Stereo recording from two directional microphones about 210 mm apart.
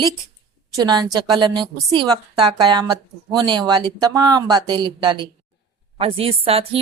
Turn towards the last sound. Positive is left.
turn(degrees=-25)  # may be behind; listen again after turning